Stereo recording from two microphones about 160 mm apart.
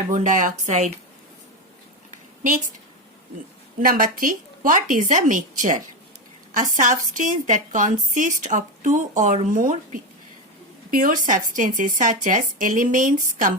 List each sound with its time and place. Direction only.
0.1 s a woman's voice: 50° right (ahead or behind)
3.8 s a woman's voice: 60° right (ahead or behind)